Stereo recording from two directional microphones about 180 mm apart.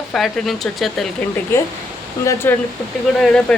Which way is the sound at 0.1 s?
Centre (ahead or behind).